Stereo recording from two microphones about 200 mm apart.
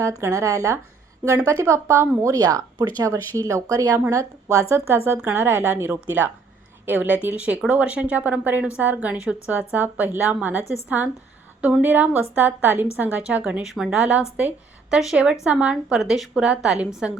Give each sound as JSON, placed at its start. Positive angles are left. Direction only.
{"t": 0.0, "sound": "a woman's voice", "side_deg": -15}